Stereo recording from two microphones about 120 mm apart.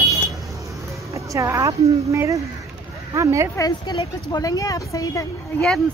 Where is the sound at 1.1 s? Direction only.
25° right (ahead or behind).